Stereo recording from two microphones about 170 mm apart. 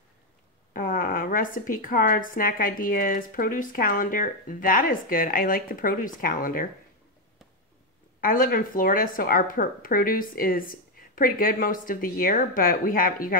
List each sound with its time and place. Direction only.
0.7 s a woman's voice: 55° left (ahead or behind)
8.2 s a woman's voice: 55° left (ahead or behind)